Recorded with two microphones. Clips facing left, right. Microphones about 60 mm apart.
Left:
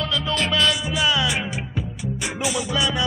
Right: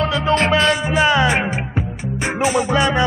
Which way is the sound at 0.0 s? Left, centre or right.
Right.